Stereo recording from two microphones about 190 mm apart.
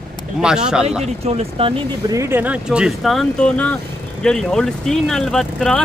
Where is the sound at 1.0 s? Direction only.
35° right (ahead or behind).